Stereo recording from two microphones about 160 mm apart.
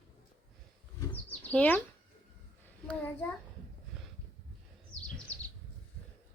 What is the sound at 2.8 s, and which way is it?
Speech, 10° left (ahead or behind).